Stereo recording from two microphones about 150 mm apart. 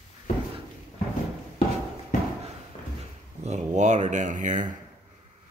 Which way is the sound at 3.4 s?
50° right (ahead or behind).